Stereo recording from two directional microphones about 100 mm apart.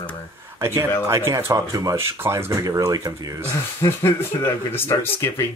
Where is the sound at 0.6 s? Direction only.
25° right (ahead or behind).